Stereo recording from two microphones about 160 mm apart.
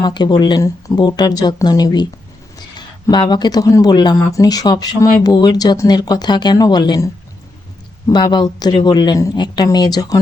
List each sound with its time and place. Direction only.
0.0 s speech: 25° left (ahead or behind)